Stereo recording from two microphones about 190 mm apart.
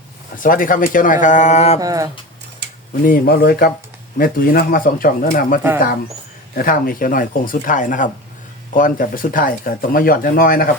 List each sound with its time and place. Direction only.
0.3 s speech: 45° left (ahead or behind)
1.8 s speech: 20° right (ahead or behind)
3.0 s speech: 50° left (ahead or behind)
6.6 s speech: 50° left (ahead or behind)